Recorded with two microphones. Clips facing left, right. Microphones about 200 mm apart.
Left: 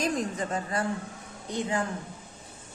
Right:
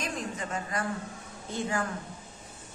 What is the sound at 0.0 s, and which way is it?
Speech, 35° left (ahead or behind).